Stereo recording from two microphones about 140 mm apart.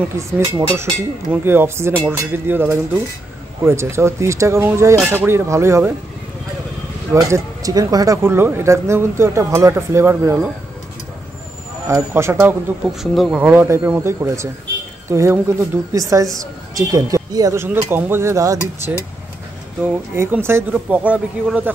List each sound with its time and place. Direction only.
0.5 s speech: 20° right (ahead or behind)
7.1 s speech: 20° right (ahead or behind)
11.9 s speech: 20° right (ahead or behind)
13.0 s speech: centre (ahead or behind)
13.4 s speech: 15° right (ahead or behind)
19.8 s speech: 15° right (ahead or behind)